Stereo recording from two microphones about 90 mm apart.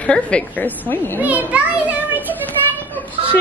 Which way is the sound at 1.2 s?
20° right (ahead or behind).